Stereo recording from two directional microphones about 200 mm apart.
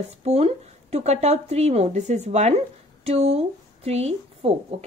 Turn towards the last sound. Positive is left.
turn(degrees=-30)  # may be behind; listen again after turning